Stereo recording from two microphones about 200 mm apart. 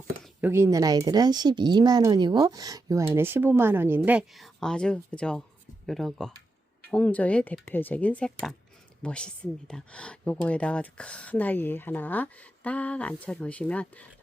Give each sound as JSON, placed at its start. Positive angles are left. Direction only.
{"t": 0.4, "sound": "speech", "side_deg": -15}